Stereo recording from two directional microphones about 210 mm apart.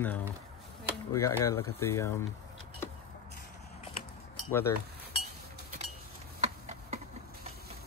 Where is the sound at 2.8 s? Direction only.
10° left (ahead or behind).